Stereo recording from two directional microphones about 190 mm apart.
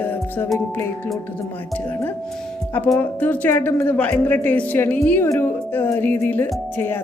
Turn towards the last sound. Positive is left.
turn(degrees=10)  # may be behind; listen again after turning